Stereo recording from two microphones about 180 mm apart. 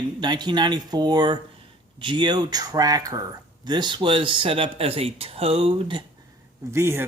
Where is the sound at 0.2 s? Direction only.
25° right (ahead or behind).